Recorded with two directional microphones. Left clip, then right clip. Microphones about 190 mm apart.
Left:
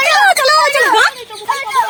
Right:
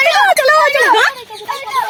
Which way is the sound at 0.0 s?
10° left (ahead or behind).